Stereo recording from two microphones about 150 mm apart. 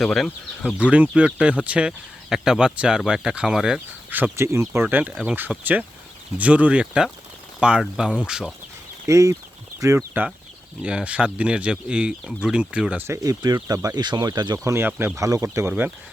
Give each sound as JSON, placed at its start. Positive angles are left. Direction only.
{"t": 0.0, "sound": "speech", "side_deg": 0}
{"t": 9.0, "sound": "speech", "side_deg": -20}
{"t": 10.8, "sound": "speech", "side_deg": -10}
{"t": 13.1, "sound": "speech", "side_deg": -25}